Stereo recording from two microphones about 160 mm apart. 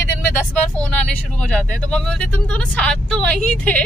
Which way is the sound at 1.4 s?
5° left (ahead or behind).